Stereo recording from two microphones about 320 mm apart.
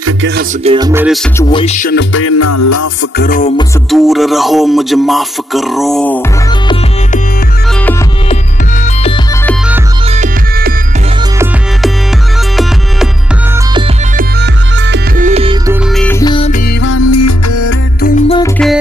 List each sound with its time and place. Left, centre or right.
0.0 s music: right
0.7 s music: centre
1.5 s music: centre; by 2.9 s left
3.2 s music: left
3.9 s speech: centre
10.1 s music: right
14.1 s music: right
15.7 s music: centre
16.8 s music: left
18.0 s music: left
18.4 s music: centre